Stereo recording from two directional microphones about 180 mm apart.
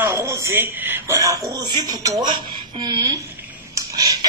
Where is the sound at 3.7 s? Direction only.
20° right (ahead or behind).